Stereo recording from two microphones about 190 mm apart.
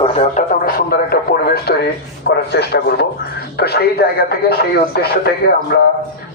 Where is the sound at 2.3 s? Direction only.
60° left (ahead or behind).